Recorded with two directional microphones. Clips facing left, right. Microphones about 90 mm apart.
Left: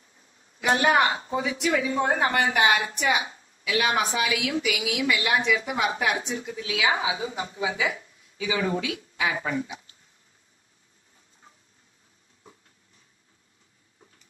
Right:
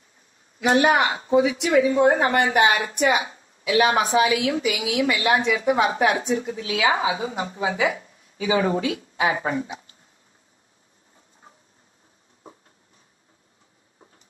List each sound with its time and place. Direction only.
1.4 s speech: 30° right (ahead or behind)